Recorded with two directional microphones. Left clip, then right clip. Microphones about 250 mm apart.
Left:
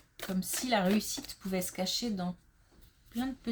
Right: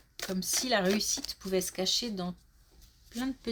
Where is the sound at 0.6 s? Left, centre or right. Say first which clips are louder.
Right 1 dB; right.